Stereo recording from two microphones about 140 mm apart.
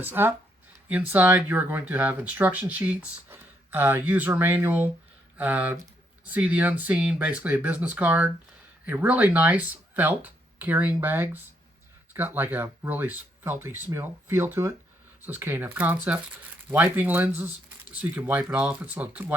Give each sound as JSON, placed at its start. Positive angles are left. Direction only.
{"t": 0.0, "sound": "speech", "side_deg": -15}